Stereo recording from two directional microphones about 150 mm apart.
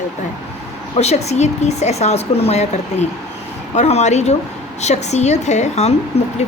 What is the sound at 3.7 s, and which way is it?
Speech, 50° left (ahead or behind).